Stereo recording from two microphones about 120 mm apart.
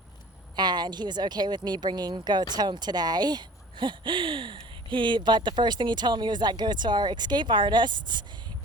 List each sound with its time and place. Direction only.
0.5 s a woman's voice: 35° right (ahead or behind)